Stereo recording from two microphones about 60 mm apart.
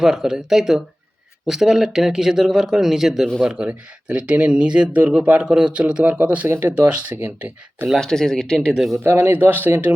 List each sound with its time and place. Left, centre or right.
0.0 s speech: centre
3.4 s speech: centre
6.5 s speech: right
7.9 s speech: centre
9.0 s speech: right